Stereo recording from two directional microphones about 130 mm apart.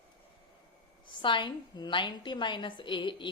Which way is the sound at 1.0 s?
40° left (ahead or behind).